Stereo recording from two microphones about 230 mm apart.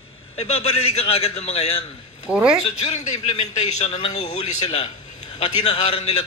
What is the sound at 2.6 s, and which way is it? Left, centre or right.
A man's voice, left.